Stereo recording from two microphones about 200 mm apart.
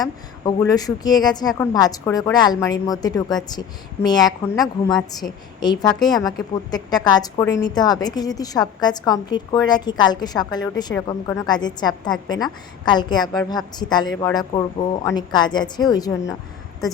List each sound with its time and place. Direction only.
0.0 s a woman's voice: 20° left (ahead or behind)